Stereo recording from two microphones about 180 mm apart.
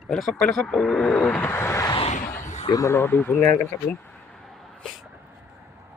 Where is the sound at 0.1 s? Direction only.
Centre (ahead or behind); by 2.0 s 20° left (ahead or behind).